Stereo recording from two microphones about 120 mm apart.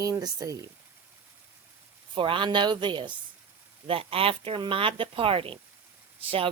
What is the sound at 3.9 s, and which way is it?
Speech, 50° right (ahead or behind).